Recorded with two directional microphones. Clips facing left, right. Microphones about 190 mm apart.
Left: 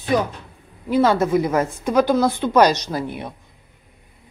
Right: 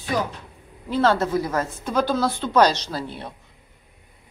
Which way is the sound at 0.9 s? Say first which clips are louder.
Left 3 dB; 15° left (ahead or behind).